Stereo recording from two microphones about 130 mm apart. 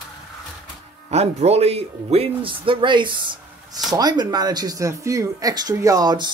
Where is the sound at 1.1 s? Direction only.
55° right (ahead or behind).